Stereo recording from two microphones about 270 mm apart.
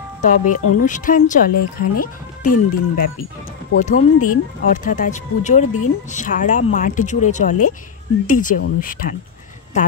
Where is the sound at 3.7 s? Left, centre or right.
Left.